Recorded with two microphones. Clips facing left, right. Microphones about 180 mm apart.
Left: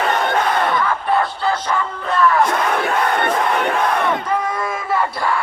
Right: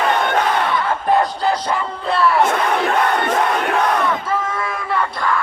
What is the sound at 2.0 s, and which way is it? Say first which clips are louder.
Battle cry: even; 35° right (ahead or behind).